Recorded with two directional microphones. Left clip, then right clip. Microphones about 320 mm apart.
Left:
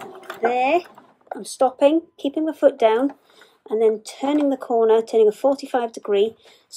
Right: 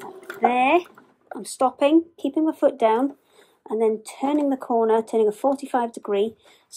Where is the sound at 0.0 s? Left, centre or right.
Centre.